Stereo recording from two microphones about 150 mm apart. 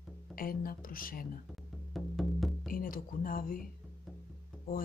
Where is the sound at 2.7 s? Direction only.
70° left (ahead or behind).